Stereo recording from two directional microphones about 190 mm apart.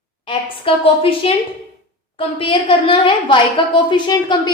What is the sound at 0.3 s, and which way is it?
A woman's voice, 30° left (ahead or behind).